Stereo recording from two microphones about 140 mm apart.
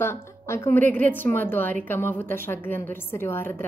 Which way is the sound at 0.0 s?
20° left (ahead or behind).